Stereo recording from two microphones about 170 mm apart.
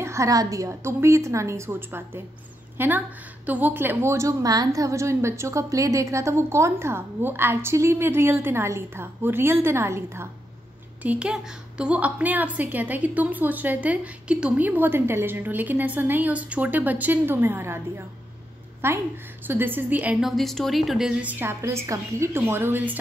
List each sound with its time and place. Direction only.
0.0 s a woman's voice: 15° right (ahead or behind)